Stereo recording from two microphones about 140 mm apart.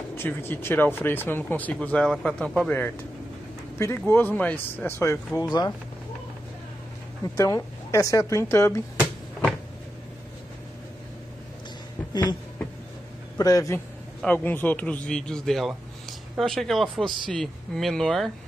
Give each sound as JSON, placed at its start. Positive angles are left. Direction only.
{"t": 0.1, "sound": "speech", "side_deg": 15}
{"t": 5.4, "sound": "speech", "side_deg": 30}
{"t": 7.3, "sound": "speech", "side_deg": 20}
{"t": 12.1, "sound": "a sound", "side_deg": 30}
{"t": 13.4, "sound": "a man's voice", "side_deg": 25}
{"t": 14.2, "sound": "speech", "side_deg": 15}